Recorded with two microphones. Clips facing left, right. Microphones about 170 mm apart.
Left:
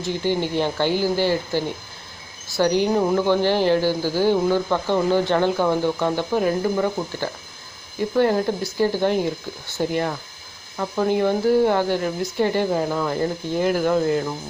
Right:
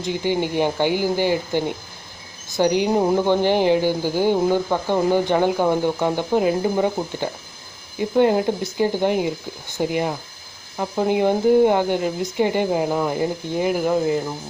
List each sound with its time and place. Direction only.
0.0 s speech: 15° right (ahead or behind)